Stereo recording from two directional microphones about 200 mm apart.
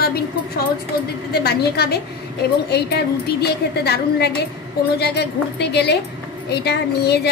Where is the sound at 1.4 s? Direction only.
55° left (ahead or behind).